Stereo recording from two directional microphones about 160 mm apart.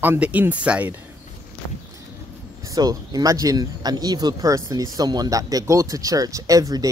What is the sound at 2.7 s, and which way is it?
Speech, 25° right (ahead or behind).